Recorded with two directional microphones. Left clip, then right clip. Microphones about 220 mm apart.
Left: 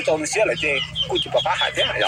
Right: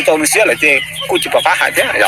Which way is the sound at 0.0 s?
50° right (ahead or behind).